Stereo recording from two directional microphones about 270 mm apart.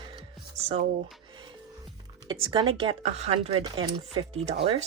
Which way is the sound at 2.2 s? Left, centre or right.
Centre.